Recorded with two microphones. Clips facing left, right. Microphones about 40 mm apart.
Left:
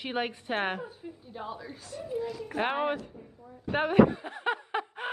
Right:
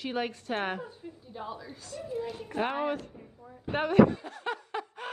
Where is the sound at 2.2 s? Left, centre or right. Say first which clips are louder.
Left 2 dB; right.